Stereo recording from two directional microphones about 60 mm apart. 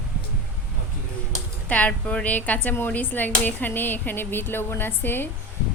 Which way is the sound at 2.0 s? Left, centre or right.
Left.